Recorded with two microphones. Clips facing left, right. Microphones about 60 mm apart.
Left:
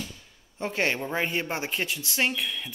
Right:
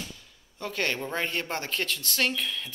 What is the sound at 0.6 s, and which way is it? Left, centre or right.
Speech, left.